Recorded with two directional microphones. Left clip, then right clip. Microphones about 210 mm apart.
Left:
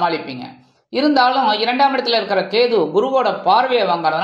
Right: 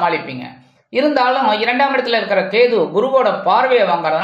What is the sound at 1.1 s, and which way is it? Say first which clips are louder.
A woman's voice: left 2 dB; 25° left (ahead or behind).